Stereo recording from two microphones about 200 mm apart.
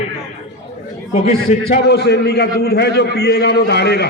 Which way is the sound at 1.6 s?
55° left (ahead or behind).